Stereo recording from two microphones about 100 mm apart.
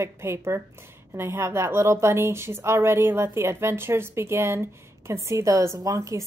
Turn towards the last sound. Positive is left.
turn(degrees=-35)  # may be behind; listen again after turning